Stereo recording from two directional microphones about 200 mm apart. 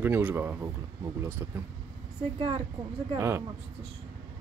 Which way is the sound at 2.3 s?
25° right (ahead or behind).